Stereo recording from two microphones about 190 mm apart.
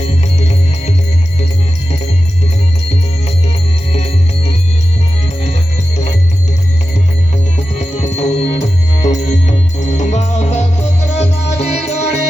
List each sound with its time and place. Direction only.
0.0 s music: 35° left (ahead or behind)
3.9 s music: 35° left (ahead or behind)
7.5 s music: 40° left (ahead or behind)